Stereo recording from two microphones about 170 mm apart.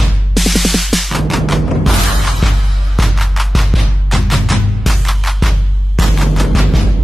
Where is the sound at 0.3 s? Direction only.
Centre (ahead or behind).